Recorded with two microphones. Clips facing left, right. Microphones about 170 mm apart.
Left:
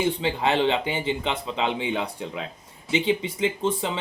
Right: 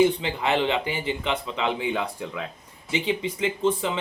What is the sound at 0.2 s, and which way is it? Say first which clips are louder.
Speech: left 2 dB; 30° left (ahead or behind).